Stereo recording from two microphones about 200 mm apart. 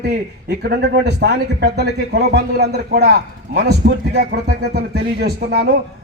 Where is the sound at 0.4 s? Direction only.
55° right (ahead or behind).